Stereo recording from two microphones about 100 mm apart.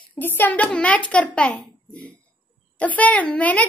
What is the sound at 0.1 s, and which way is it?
A woman's voice, 20° left (ahead or behind).